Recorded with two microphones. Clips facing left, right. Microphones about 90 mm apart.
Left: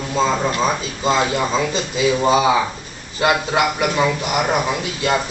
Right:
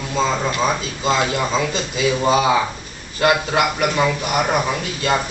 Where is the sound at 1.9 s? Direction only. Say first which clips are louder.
Left 2 dB; 10° left (ahead or behind).